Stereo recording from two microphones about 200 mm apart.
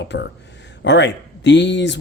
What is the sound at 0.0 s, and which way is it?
Speech, 60° left (ahead or behind).